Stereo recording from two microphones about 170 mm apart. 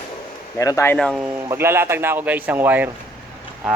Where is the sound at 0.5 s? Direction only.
20° left (ahead or behind).